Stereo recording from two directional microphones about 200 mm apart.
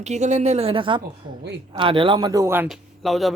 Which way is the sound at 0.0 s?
35° right (ahead or behind).